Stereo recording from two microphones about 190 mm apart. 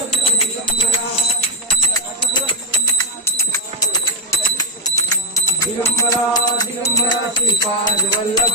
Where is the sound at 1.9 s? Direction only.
25° left (ahead or behind).